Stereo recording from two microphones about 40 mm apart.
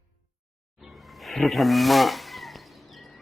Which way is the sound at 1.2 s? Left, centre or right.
Centre.